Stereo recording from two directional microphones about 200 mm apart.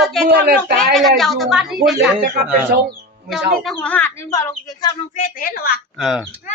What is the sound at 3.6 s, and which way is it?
Speech, 5° left (ahead or behind).